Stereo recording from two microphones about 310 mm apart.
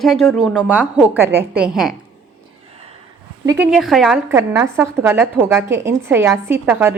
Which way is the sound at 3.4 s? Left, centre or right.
Centre.